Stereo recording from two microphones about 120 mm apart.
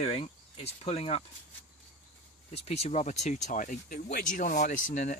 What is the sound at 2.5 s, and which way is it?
Speech, 60° left (ahead or behind).